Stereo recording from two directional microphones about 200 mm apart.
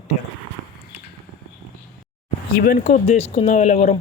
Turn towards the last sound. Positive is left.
turn(degrees=35)  # may be behind; listen again after turning